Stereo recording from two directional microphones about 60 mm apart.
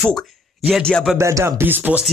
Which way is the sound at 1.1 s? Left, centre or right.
Right.